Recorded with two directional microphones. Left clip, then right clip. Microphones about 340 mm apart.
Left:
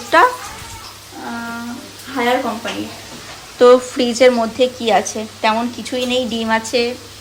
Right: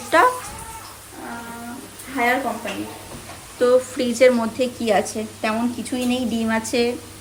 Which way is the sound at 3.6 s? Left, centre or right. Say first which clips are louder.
Left 7 dB; centre.